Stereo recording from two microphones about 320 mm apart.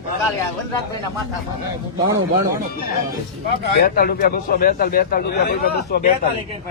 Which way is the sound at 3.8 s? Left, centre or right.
Left.